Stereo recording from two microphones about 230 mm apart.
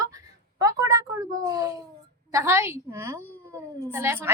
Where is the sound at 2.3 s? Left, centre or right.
Centre.